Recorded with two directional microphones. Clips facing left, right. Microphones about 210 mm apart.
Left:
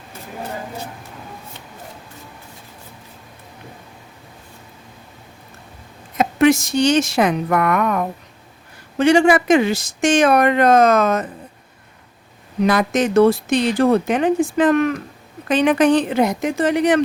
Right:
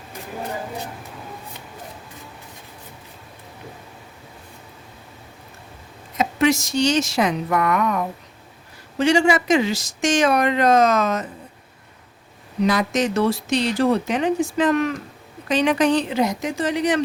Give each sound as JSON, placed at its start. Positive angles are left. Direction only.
{"t": 6.1, "sound": "speech", "side_deg": 55}
{"t": 12.6, "sound": "speech", "side_deg": 55}